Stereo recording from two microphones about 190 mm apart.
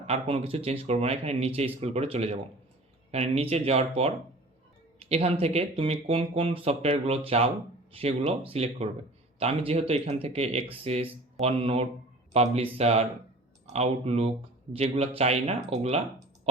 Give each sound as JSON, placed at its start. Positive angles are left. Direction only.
{"t": 0.0, "sound": "speech", "side_deg": -35}